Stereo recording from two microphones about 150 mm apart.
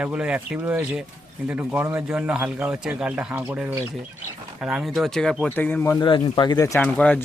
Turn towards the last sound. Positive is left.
turn(degrees=10)  # may be behind; listen again after turning